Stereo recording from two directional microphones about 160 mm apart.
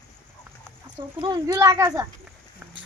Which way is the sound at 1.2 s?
25° right (ahead or behind).